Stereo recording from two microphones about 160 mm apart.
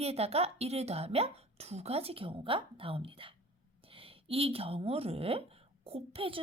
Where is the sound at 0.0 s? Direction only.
40° right (ahead or behind).